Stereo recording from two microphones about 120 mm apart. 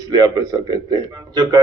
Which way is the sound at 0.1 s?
35° right (ahead or behind).